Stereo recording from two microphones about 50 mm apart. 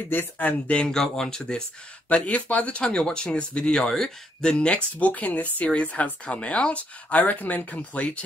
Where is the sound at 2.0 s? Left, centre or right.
Left.